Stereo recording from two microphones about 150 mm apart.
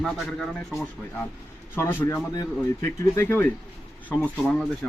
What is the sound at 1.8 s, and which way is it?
A man's voice, 20° left (ahead or behind).